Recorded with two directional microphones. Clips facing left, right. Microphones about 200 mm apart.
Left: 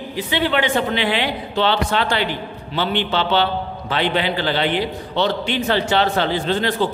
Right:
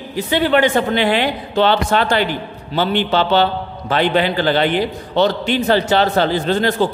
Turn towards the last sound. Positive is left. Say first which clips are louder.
# right 3 dB
turn(degrees=-45)  # may be behind; listen again after turning